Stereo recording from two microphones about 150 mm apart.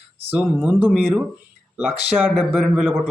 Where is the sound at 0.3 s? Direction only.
10° right (ahead or behind).